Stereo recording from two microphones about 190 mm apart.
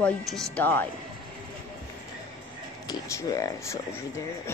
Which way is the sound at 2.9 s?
15° left (ahead or behind).